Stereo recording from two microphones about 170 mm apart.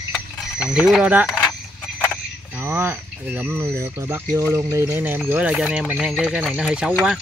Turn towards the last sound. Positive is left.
turn(degrees=-5)  # may be behind; listen again after turning